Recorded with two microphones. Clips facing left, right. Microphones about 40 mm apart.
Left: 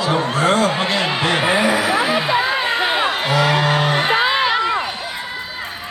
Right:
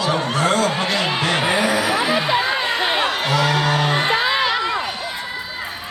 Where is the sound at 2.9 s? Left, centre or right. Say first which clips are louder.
Left 1 dB; centre.